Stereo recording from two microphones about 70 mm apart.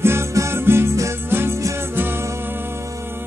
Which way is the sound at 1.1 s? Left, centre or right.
Right.